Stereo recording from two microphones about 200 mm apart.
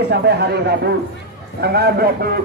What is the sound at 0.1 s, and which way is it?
A man's voice, 55° right (ahead or behind).